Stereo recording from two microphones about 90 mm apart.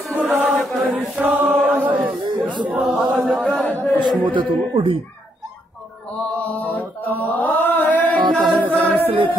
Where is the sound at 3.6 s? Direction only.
20° left (ahead or behind).